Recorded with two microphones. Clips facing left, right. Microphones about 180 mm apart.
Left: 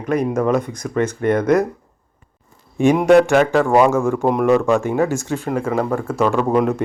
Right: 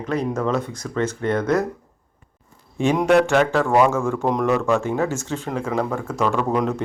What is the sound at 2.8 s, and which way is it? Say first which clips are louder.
Speech: left 5 dB; 10° left (ahead or behind).